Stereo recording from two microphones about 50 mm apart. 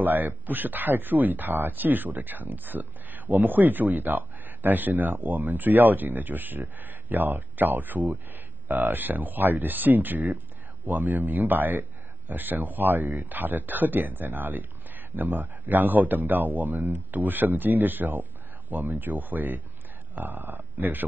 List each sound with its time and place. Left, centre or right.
0.0 s speech: right